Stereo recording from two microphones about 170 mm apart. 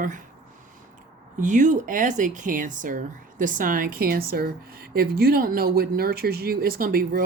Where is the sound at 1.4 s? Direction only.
45° right (ahead or behind).